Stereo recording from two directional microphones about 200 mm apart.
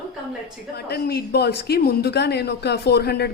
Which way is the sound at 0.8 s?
50° left (ahead or behind).